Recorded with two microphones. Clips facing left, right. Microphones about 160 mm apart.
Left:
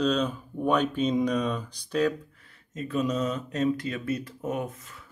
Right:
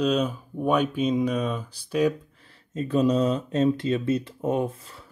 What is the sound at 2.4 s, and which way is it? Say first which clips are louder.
Speech: right 5 dB; 30° right (ahead or behind).